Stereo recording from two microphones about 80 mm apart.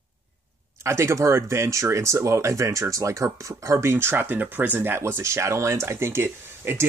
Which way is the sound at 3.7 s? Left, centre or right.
Right.